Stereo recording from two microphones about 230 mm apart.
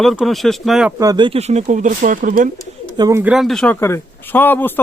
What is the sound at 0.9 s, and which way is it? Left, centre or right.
Speech, centre.